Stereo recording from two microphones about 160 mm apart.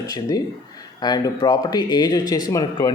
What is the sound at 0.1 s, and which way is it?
Speech, 25° left (ahead or behind).